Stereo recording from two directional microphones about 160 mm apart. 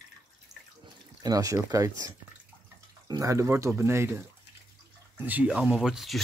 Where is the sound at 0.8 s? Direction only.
25° right (ahead or behind).